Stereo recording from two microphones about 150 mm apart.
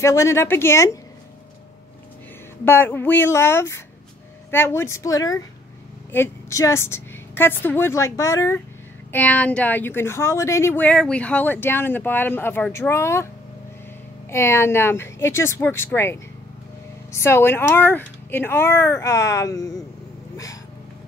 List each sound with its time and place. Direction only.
0.0 s speech: 20° left (ahead or behind)
2.6 s speech: 15° left (ahead or behind)
9.1 s speech: 10° left (ahead or behind)
14.3 s speech: 15° left (ahead or behind)